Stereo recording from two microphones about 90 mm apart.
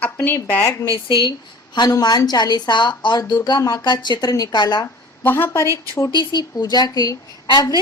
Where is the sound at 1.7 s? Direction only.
50° left (ahead or behind).